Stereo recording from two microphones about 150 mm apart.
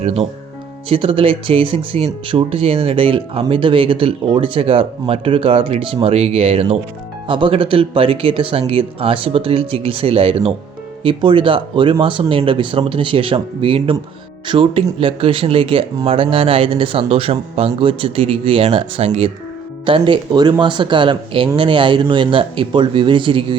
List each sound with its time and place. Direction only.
0.0 s speech: 45° right (ahead or behind)